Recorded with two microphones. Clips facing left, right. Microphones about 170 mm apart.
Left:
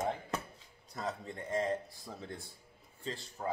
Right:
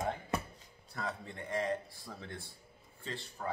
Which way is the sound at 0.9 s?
25° left (ahead or behind).